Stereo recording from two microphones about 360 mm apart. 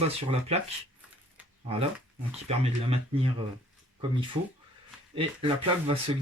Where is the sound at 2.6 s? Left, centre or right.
Centre.